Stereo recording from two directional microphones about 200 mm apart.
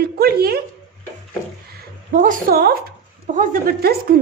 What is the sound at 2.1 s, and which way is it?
A woman's voice, 45° right (ahead or behind).